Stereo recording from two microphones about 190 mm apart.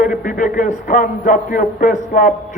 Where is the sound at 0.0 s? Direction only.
45° left (ahead or behind).